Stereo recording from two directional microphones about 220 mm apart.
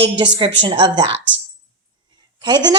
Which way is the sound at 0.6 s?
20° right (ahead or behind).